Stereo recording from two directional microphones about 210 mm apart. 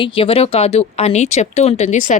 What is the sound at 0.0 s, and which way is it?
Speech, 25° left (ahead or behind).